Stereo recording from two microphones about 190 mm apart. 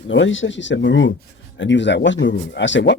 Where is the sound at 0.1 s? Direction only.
85° left.